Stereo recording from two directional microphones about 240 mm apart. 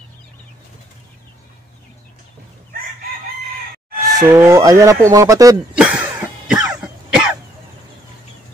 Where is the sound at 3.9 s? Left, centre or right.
Right.